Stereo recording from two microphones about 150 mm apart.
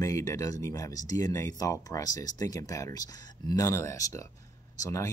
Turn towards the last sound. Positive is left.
turn(degrees=20)  # may be behind; listen again after turning